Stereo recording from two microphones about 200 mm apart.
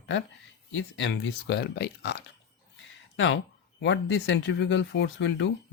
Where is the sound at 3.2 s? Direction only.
60° left (ahead or behind).